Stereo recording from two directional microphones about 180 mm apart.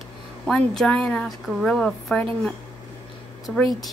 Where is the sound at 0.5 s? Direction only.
5° left (ahead or behind).